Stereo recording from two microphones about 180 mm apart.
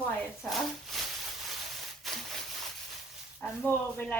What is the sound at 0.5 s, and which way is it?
Speech, centre (ahead or behind).